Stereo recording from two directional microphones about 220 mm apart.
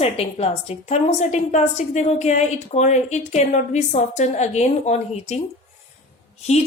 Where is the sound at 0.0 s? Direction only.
25° left (ahead or behind).